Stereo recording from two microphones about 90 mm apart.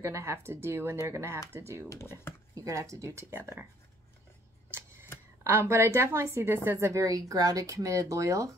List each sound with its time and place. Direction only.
0.0 s speech: 30° right (ahead or behind)
1.9 s speech: 30° left (ahead or behind)
2.5 s a woman's voice: 40° right (ahead or behind)
5.4 s a woman's voice: 30° right (ahead or behind)